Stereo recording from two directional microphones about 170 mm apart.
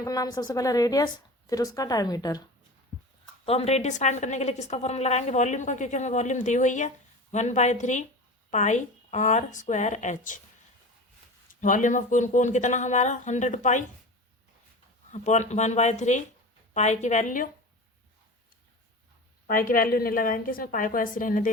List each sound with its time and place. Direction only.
0.0 s a woman's voice: 20° left (ahead or behind)
3.4 s a woman's voice: 35° left (ahead or behind)
11.6 s a woman's voice: 50° left (ahead or behind)
15.1 s a woman's voice: 45° left (ahead or behind)
19.5 s a woman's voice: 55° left (ahead or behind)